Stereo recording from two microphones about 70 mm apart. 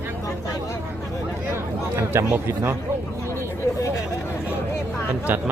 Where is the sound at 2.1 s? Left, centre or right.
Right.